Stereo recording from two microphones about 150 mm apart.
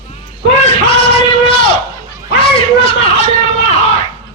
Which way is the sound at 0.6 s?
40° left (ahead or behind).